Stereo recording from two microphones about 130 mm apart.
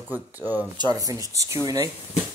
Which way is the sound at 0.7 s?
30° right (ahead or behind).